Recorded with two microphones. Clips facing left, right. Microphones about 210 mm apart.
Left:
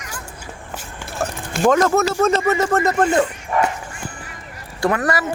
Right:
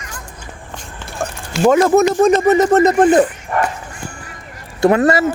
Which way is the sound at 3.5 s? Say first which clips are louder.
Even; centre (ahead or behind).